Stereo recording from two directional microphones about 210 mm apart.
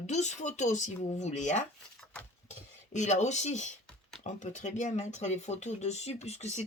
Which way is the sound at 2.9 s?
35° left (ahead or behind).